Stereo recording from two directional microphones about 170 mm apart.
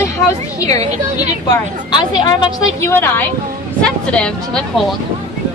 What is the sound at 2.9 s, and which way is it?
Speech, 15° left (ahead or behind).